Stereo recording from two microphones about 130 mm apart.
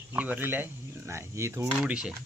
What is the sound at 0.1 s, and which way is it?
Speech, 15° right (ahead or behind).